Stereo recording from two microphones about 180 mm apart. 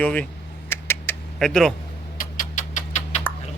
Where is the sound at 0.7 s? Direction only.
10° left (ahead or behind).